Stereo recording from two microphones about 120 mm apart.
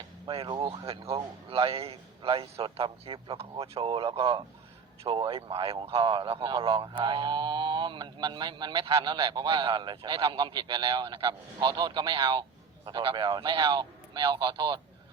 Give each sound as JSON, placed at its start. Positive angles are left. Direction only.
{"t": 0.3, "sound": "a man's voice", "side_deg": -45}